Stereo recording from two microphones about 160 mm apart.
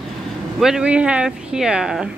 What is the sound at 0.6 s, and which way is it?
Speech, 5° right (ahead or behind).